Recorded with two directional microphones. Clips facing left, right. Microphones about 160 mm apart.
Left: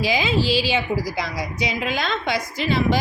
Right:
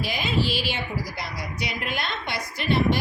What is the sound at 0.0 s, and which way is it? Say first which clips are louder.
A woman's voice: left 5 dB; 90° left.